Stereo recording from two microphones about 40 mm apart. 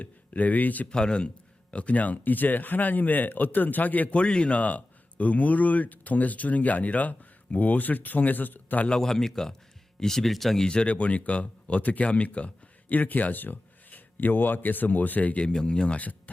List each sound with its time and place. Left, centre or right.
0.0 s speech: left
0.9 s a man's voice: left
1.7 s speech: left
4.1 s speech: left
8.9 s a man's voice: centre
10.6 s a man's voice: left
10.8 s speech: left
12.9 s speech: left
15.5 s a man's voice: left
16.0 s speech: left